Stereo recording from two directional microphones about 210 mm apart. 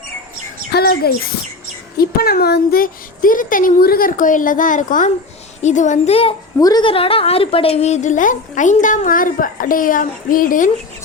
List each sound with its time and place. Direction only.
0.7 s bird: 50° left (ahead or behind)
2.0 s a woman's voice: 45° left (ahead or behind)